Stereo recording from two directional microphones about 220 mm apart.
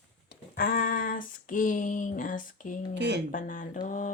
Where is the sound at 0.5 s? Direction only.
40° left (ahead or behind).